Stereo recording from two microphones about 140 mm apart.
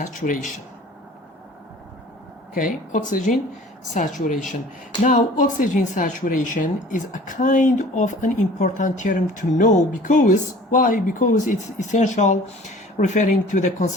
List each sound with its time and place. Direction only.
0.0 s speech: 65° left (ahead or behind)
2.6 s speech: 70° left (ahead or behind)
5.0 s speech: 65° left (ahead or behind)